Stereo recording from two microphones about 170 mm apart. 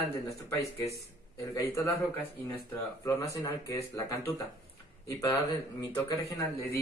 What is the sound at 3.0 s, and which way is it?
Speech, 20° left (ahead or behind).